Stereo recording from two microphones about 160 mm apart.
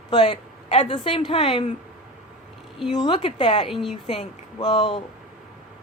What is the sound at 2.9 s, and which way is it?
Speech, 30° left (ahead or behind).